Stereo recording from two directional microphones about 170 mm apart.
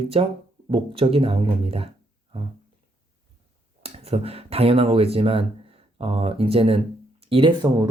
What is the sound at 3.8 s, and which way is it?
Speech, 35° right (ahead or behind).